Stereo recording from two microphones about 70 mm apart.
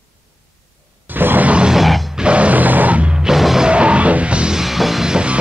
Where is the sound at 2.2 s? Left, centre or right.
Centre.